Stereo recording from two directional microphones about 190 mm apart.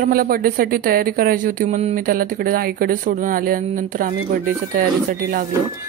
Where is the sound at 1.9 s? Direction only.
50° right (ahead or behind).